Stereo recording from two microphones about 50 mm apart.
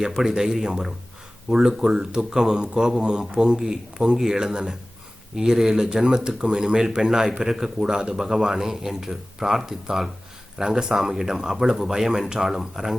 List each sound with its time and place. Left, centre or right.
0.0 s speech: centre